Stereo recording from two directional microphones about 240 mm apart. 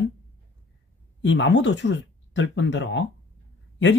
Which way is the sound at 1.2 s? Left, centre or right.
Left.